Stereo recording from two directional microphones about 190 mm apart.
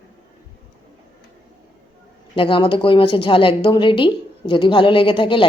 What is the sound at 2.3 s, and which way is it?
Speech, 25° left (ahead or behind).